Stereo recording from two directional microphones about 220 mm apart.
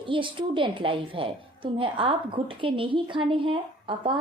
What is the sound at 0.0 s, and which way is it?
A woman's voice, 20° right (ahead or behind).